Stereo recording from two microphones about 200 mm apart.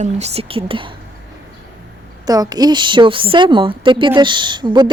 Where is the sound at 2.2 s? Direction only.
20° right (ahead or behind).